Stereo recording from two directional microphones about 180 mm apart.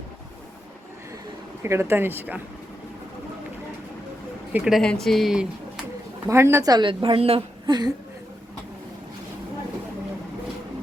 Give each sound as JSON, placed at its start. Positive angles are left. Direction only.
{"t": 1.6, "sound": "speech", "side_deg": -15}
{"t": 4.5, "sound": "speech", "side_deg": 0}
{"t": 6.2, "sound": "a woman's voice", "side_deg": -15}